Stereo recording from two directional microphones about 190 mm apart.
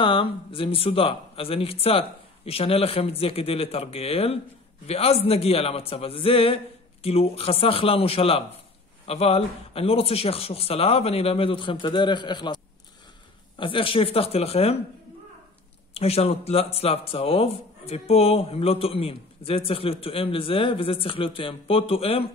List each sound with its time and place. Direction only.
0.0 s speech: 25° left (ahead or behind)
13.6 s speech: 25° left (ahead or behind)
15.9 s speech: 30° left (ahead or behind)